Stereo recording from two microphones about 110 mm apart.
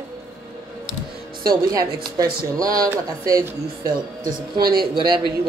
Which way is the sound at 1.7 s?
35° right (ahead or behind).